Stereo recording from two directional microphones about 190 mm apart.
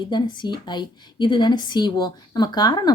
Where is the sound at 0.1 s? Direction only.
25° left (ahead or behind).